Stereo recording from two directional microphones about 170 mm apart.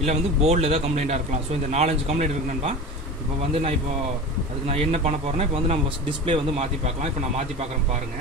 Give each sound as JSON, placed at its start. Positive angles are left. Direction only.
{"t": 0.0, "sound": "speech", "side_deg": -40}
{"t": 4.6, "sound": "speech", "side_deg": -40}